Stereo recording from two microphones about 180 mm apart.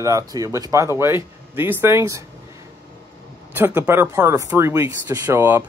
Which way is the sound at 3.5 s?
10° right (ahead or behind).